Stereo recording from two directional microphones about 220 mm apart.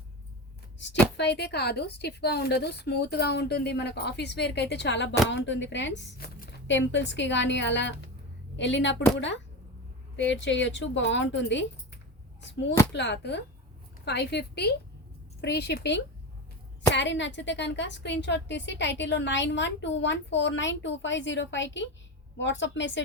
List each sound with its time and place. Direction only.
0.8 s a woman's voice: 55° left (ahead or behind)
12.9 s a woman's voice: 50° left (ahead or behind)